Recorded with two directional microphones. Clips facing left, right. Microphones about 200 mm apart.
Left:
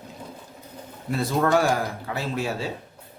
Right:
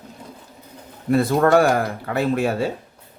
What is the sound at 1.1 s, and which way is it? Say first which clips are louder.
Speech: right 6 dB; 55° right (ahead or behind).